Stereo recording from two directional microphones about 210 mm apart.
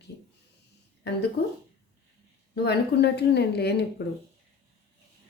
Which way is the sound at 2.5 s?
50° left (ahead or behind).